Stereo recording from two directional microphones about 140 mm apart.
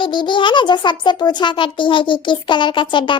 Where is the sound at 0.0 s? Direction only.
35° left (ahead or behind).